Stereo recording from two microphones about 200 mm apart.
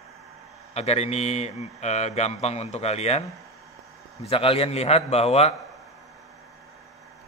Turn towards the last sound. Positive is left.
turn(degrees=30)  # may be behind; listen again after turning